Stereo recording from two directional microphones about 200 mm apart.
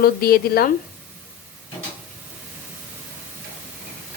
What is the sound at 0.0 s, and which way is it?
Speech, 50° left (ahead or behind).